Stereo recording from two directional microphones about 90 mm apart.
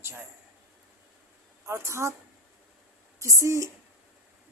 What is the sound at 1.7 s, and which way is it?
Speech, 30° right (ahead or behind).